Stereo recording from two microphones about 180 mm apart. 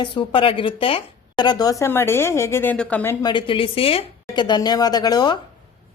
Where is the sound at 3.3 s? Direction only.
25° left (ahead or behind).